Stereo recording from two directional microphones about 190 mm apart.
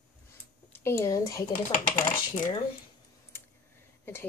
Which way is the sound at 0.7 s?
15° left (ahead or behind).